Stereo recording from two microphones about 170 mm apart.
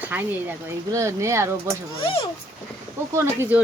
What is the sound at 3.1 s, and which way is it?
Speech, 15° right (ahead or behind).